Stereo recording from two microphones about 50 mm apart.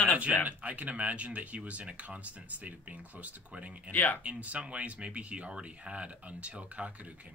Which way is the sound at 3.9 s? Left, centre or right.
Left.